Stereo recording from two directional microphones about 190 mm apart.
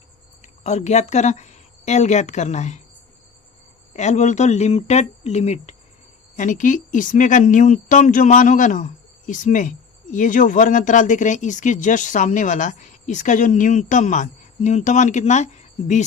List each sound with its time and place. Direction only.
0.4 s speech: 35° left (ahead or behind)
3.9 s speech: 40° left (ahead or behind)